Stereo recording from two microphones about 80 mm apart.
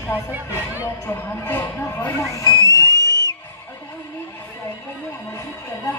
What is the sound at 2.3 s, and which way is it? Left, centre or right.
Speech, left.